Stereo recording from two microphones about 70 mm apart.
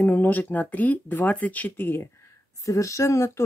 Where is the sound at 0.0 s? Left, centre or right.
Left.